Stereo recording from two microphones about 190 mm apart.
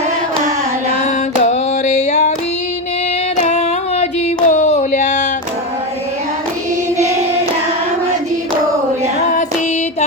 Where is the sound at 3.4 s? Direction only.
35° left (ahead or behind).